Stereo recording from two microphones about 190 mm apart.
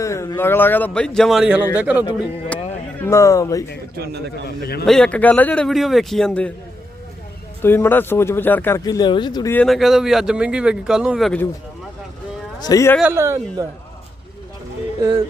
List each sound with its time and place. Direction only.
0.0 s a man's voice: 15° left (ahead or behind); by 2.0 s 10° right (ahead or behind)
3.0 s speech: 15° left (ahead or behind)
3.9 s speech: 60° right (ahead or behind)
4.4 s a man's voice: 55° left (ahead or behind)
4.9 s a man's voice: 5° left (ahead or behind)
7.6 s speech: 10° left (ahead or behind)
9.6 s a man's voice: centre (ahead or behind)
12.6 s speech: 15° left (ahead or behind)
13.0 s speech: 10° right (ahead or behind)